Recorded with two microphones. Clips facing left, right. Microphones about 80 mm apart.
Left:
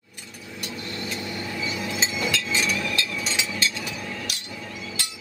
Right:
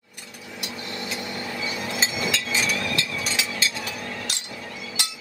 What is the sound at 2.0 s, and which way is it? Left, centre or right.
Hammer, centre.